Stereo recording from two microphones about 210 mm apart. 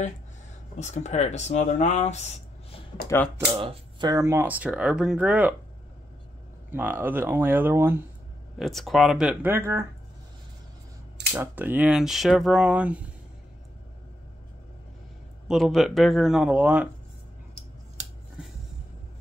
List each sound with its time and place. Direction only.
0.7 s speech: 35° left (ahead or behind)
3.3 s speech: 15° right (ahead or behind)
6.7 s speech: 10° right (ahead or behind)
8.5 s speech: centre (ahead or behind)
11.3 s speech: 10° right (ahead or behind)
15.4 s speech: centre (ahead or behind)